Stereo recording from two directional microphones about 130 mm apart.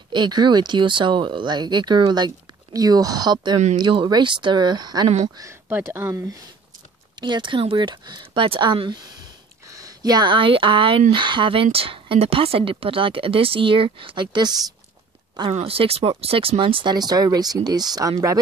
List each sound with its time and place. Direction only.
0.1 s speech: 35° right (ahead or behind)
5.7 s speech: 15° right (ahead or behind); by 14.6 s 35° right (ahead or behind)
15.5 s speech: 45° right (ahead or behind); by 18.4 s 25° right (ahead or behind)